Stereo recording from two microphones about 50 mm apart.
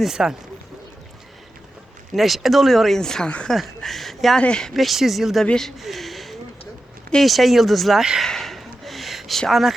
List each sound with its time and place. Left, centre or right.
0.0 s speech: centre
2.1 s speech: centre
4.4 s speech: centre
4.7 s speech: centre
5.8 s a sound: centre
7.2 s speech: centre
8.2 s gasp: centre
9.5 s speech: centre